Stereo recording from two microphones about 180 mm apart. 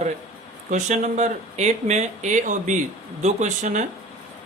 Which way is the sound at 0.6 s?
40° right (ahead or behind).